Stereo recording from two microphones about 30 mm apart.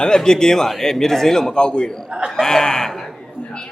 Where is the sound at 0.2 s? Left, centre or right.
Left.